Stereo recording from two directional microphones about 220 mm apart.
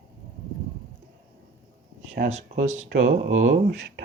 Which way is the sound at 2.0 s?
50° right (ahead or behind).